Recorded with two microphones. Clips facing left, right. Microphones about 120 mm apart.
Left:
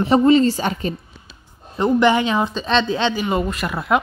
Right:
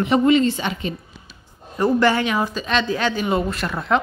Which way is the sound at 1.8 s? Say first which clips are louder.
Left 2 dB; 20° left (ahead or behind).